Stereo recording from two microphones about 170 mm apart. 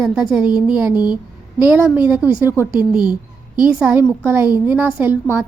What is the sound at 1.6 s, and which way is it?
A woman's voice, 10° right (ahead or behind).